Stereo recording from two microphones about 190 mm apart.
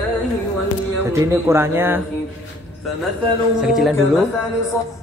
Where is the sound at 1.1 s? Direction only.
15° right (ahead or behind).